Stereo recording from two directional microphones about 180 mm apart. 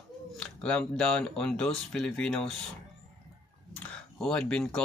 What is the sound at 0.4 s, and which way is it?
Speech, 5° left (ahead or behind).